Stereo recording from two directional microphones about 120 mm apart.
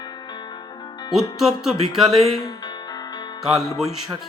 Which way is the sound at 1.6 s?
5° right (ahead or behind).